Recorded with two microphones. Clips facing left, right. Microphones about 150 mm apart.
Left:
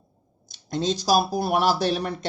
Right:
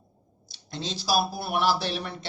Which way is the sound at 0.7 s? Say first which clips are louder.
Left 6 dB; 45° left (ahead or behind).